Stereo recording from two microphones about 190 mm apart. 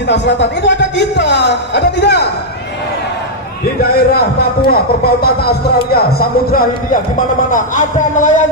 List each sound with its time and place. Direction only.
0.0 s speech: 65° left (ahead or behind)
3.9 s speech: 55° left (ahead or behind)